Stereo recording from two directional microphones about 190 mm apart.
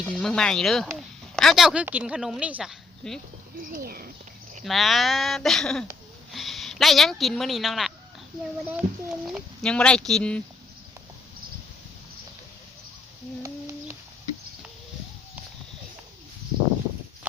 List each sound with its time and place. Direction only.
0.0 s a woman's voice: centre (ahead or behind)
3.6 s speech: 50° right (ahead or behind)
4.6 s speech: centre (ahead or behind)
13.4 s a sound: 15° right (ahead or behind)